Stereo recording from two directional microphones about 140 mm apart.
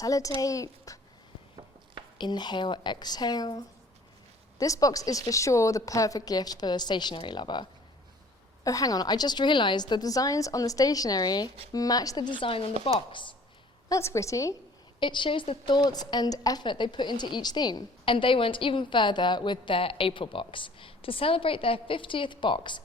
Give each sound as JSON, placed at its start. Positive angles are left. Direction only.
{"t": 0.0, "sound": "a woman's voice", "side_deg": 25}
{"t": 2.1, "sound": "a woman's voice", "side_deg": 30}
{"t": 13.9, "sound": "a woman's voice", "side_deg": 20}
{"t": 15.0, "sound": "a woman's voice", "side_deg": 35}